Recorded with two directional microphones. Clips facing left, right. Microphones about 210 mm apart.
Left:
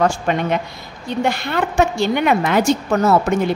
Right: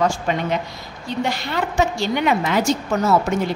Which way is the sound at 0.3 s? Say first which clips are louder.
Left 3 dB; 55° left (ahead or behind).